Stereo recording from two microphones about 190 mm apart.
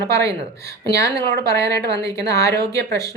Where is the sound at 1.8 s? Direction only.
60° right (ahead or behind).